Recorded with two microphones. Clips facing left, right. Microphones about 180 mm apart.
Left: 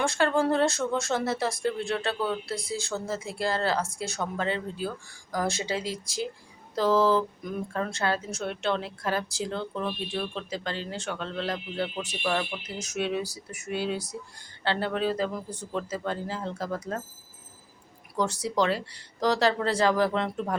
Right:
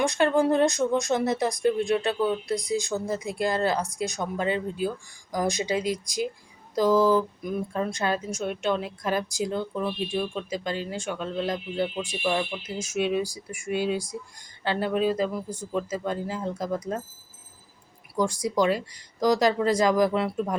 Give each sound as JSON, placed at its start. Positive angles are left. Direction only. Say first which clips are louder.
{"t": 0.0, "sound": "speech", "louder": "right 3 dB", "side_deg": -15}
{"t": 18.2, "sound": "speech", "louder": "right 2 dB", "side_deg": -10}